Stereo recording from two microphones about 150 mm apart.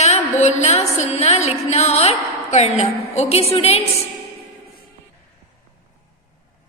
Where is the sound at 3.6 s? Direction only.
40° left (ahead or behind).